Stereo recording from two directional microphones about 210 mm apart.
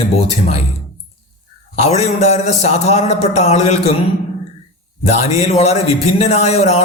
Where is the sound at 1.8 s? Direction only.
30° left (ahead or behind).